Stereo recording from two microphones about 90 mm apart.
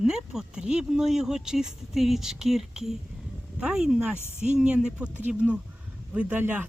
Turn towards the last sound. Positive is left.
turn(degrees=-20)  # may be behind; listen again after turning